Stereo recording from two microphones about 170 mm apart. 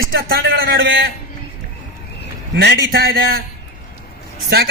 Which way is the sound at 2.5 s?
85° right.